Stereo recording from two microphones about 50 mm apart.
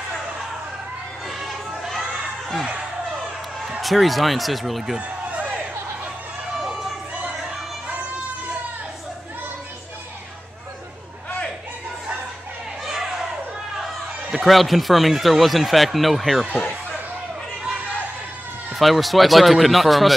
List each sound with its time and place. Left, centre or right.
1.4 s crowd: centre
3.8 s speech: centre
4.9 s a sound: right
12.8 s a sound: centre
14.3 s speech: centre
18.8 s speech: centre